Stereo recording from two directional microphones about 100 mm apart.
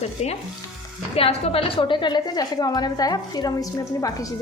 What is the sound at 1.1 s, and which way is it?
A woman's voice, 75° left (ahead or behind).